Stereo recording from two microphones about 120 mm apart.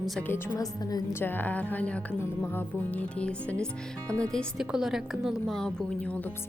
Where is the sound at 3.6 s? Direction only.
25° right (ahead or behind).